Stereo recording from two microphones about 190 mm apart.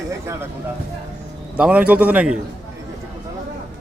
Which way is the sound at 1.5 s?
5° right (ahead or behind).